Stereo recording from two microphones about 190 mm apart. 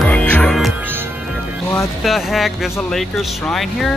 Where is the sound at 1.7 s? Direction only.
Centre (ahead or behind).